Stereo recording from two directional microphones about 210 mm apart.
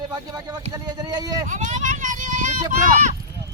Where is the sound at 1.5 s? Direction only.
35° right (ahead or behind).